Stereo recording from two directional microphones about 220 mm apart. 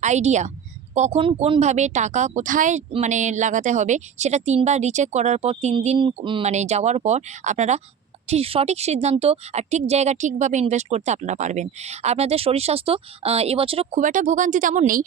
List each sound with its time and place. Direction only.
0.0 s a woman's voice: 30° right (ahead or behind)